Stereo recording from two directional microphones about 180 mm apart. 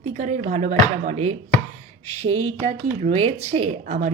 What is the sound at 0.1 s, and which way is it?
A woman's voice, 45° right (ahead or behind).